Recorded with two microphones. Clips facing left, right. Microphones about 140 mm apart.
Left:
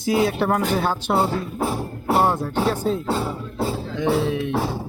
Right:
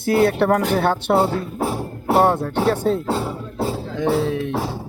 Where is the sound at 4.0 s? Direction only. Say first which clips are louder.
Right 1 dB; 40° right (ahead or behind).